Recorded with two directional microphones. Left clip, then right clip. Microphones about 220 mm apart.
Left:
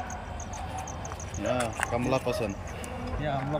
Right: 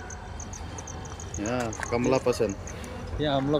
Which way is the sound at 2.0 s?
10° right (ahead or behind).